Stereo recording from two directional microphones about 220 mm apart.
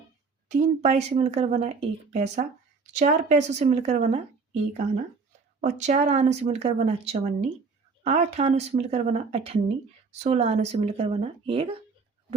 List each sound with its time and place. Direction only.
0.4 s speech: 30° right (ahead or behind)